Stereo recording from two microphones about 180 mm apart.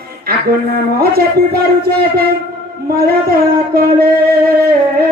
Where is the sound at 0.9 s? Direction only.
55° right (ahead or behind).